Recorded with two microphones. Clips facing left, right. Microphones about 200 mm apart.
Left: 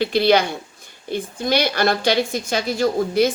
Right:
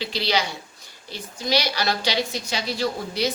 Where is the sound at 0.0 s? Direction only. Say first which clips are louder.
Left 9 dB; 55° left (ahead or behind).